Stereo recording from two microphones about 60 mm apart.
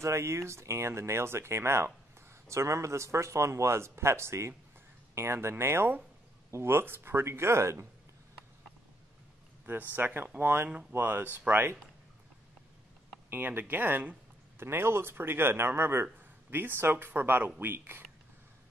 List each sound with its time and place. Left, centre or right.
0.0 s speech: right
9.9 s speech: right
13.3 s speech: right
14.6 s speech: right